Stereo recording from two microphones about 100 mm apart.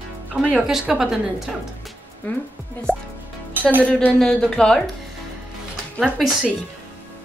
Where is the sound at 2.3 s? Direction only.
20° left (ahead or behind).